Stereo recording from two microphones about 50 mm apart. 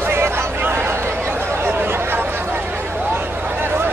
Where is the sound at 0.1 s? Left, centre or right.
Right.